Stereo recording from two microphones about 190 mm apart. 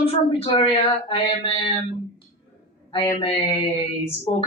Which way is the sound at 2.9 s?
25° left (ahead or behind).